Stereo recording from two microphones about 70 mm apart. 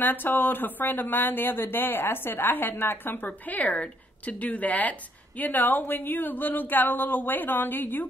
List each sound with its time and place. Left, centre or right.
0.0 s speech: left